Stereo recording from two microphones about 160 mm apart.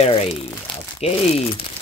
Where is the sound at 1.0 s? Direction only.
40° left (ahead or behind).